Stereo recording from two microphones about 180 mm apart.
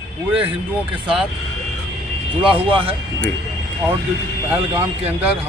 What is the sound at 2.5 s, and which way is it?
Speech, 30° right (ahead or behind).